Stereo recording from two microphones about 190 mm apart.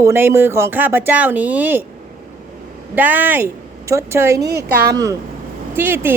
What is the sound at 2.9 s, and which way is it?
A woman's voice, 10° right (ahead or behind).